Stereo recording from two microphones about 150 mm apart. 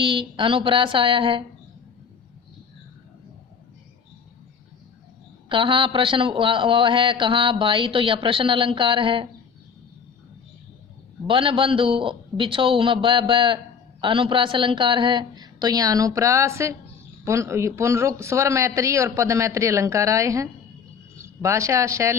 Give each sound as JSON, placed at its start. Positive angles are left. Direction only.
{"t": 0.0, "sound": "a man's voice", "side_deg": -35}
{"t": 5.5, "sound": "a man's voice", "side_deg": -35}
{"t": 11.3, "sound": "a man's voice", "side_deg": -35}